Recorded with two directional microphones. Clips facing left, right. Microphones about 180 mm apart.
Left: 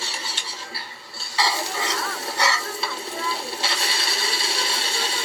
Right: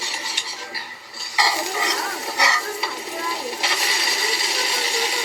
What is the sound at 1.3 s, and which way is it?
Stir, 15° right (ahead or behind).